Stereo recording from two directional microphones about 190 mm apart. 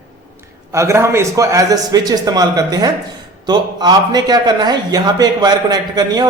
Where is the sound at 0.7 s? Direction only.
15° right (ahead or behind).